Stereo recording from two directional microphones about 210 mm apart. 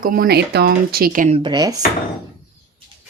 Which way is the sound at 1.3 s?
20° right (ahead or behind).